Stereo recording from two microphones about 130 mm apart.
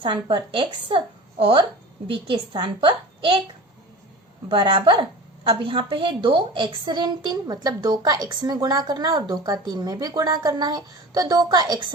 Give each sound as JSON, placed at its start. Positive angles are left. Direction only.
{"t": 0.0, "sound": "a woman's voice", "side_deg": -35}
{"t": 2.0, "sound": "a child's voice", "side_deg": -40}
{"t": 4.4, "sound": "a woman's voice", "side_deg": -40}